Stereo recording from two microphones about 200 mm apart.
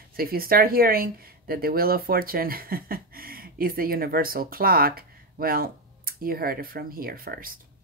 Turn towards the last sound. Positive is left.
turn(degrees=-45)  # may be behind; listen again after turning